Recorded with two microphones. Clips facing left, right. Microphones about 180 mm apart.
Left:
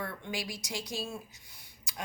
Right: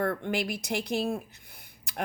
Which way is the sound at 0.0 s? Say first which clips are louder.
Right 9 dB; 55° right (ahead or behind).